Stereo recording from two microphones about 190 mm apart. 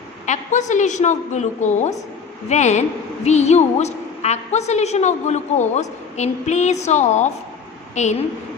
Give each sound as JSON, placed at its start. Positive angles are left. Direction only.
{"t": 0.3, "sound": "a woman's voice", "side_deg": 40}